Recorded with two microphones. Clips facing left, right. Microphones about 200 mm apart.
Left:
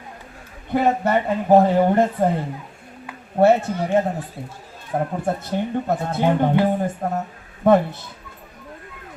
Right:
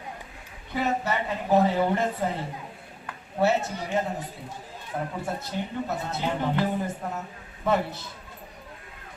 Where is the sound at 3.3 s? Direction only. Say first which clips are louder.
Left 8 dB; 55° left (ahead or behind).